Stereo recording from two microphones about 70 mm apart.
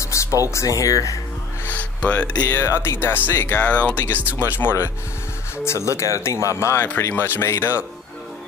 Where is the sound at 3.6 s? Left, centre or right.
Centre; by 4.7 s left.